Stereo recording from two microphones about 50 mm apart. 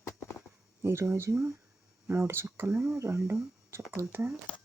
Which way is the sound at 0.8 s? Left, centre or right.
Right.